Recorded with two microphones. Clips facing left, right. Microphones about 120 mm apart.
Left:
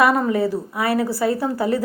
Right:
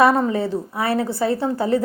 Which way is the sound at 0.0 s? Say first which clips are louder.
Right 1 dB; 25° right (ahead or behind).